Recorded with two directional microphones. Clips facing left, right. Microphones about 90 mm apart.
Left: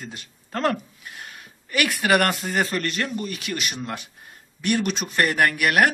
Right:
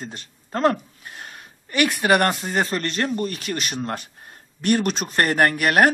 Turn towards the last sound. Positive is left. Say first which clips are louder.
# right 2 dB
turn(degrees=-35)  # may be behind; listen again after turning